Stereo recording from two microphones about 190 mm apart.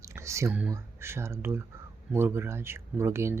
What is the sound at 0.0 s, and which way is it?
Speech, 15° right (ahead or behind).